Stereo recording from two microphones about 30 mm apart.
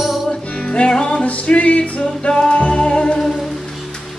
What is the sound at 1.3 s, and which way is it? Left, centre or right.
Music, left.